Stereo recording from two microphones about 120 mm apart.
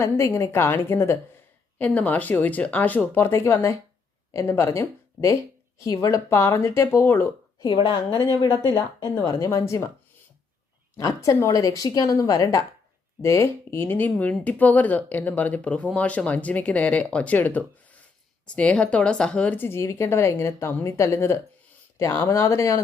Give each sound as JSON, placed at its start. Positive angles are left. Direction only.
{"t": 0.0, "sound": "speech", "side_deg": 25}
{"t": 7.6, "sound": "speech", "side_deg": 40}
{"t": 9.2, "sound": "speech", "side_deg": 25}
{"t": 10.9, "sound": "speech", "side_deg": 25}